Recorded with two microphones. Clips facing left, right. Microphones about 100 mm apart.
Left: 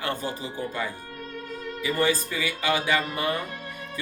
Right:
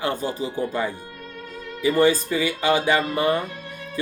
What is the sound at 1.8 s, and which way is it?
Speech, 30° right (ahead or behind).